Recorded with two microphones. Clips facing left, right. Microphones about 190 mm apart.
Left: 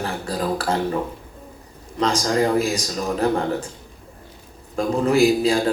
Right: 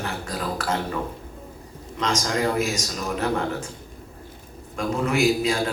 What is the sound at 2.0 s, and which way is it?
Speech, 35° left (ahead or behind).